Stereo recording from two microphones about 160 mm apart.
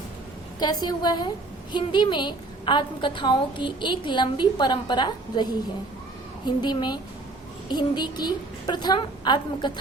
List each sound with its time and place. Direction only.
0.6 s a woman's voice: 25° left (ahead or behind)